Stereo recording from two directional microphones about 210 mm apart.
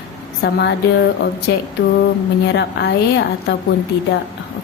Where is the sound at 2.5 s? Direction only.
55° left (ahead or behind).